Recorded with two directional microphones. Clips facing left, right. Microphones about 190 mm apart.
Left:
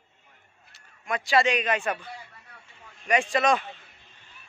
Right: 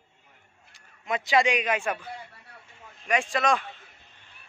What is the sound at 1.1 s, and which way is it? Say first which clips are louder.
A man's voice: even; 20° right (ahead or behind).